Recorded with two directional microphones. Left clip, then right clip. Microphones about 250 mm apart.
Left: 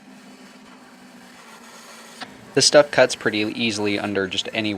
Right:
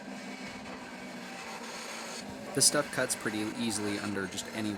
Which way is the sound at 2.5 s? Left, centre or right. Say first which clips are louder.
Left 15 dB; right.